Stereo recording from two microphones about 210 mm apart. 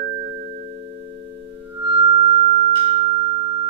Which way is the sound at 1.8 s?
25° right (ahead or behind).